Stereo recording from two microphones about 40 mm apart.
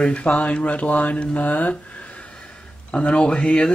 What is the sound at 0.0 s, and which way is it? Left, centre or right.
Speech, left.